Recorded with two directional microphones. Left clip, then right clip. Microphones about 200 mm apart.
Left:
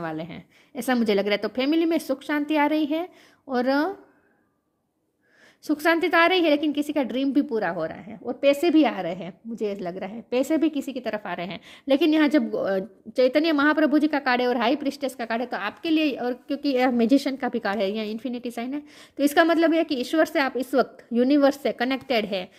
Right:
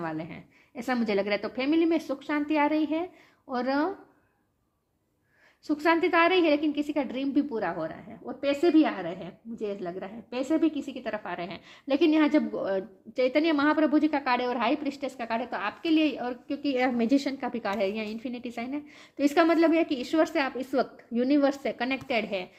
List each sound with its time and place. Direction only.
0.0 s a woman's voice: 45° left (ahead or behind)
5.6 s a woman's voice: 50° left (ahead or behind)